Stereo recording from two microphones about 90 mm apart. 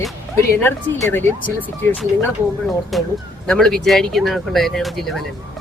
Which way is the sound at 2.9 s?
Centre (ahead or behind).